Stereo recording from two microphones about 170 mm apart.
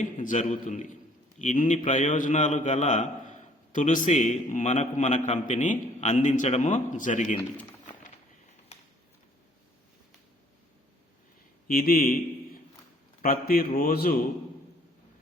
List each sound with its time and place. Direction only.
0.0 s a man's voice: 50° left (ahead or behind)
7.9 s a sound: 45° left (ahead or behind)
11.7 s a man's voice: 60° left (ahead or behind)
13.2 s a man's voice: 60° left (ahead or behind)